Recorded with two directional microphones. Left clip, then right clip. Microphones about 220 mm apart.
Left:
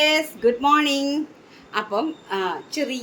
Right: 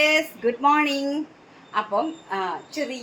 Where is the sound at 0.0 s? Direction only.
15° left (ahead or behind).